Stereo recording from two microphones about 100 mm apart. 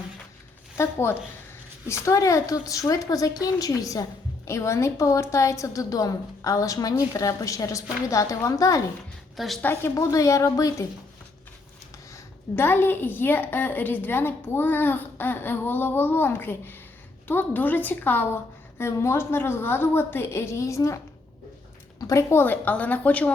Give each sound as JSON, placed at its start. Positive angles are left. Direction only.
{"t": 0.8, "sound": "a woman's voice", "side_deg": 25}
{"t": 9.3, "sound": "a woman's voice", "side_deg": 0}
{"t": 9.6, "sound": "a woman's voice", "side_deg": 20}
{"t": 9.9, "sound": "a woman's voice", "side_deg": 30}
{"t": 12.1, "sound": "a woman's voice", "side_deg": 20}
{"t": 22.0, "sound": "a woman's voice", "side_deg": 30}